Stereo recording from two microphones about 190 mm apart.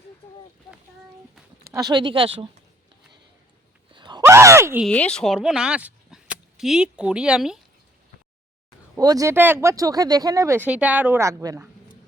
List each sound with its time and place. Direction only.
1.7 s speech: 20° right (ahead or behind)
3.9 s groan: 25° right (ahead or behind)
4.9 s speech: 5° left (ahead or behind)
9.0 s speech: 20° right (ahead or behind)